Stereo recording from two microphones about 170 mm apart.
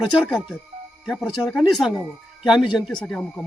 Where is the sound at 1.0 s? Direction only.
Centre (ahead or behind).